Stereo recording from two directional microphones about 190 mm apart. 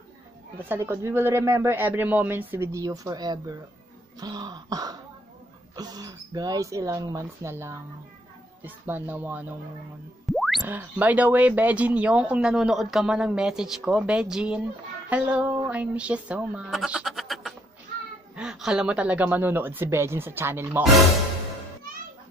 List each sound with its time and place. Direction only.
0.7 s speech: 15° right (ahead or behind)
4.2 s throat clearing: 20° right (ahead or behind)
5.8 s speech: 20° right (ahead or behind)
10.2 s music: centre (ahead or behind)
10.6 s speech: 10° right (ahead or behind)